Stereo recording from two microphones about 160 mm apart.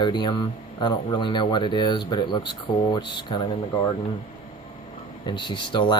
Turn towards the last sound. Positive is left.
turn(degrees=30)  # may be behind; listen again after turning